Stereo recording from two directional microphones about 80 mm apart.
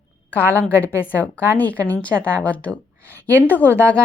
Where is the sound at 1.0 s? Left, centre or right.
Left.